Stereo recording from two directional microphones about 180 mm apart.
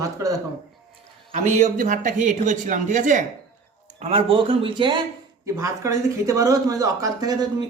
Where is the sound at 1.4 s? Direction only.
45° right (ahead or behind).